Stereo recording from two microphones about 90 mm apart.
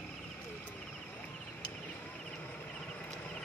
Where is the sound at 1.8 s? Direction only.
15° left (ahead or behind).